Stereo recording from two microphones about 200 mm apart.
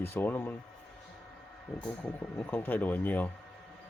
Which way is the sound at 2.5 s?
10° left (ahead or behind).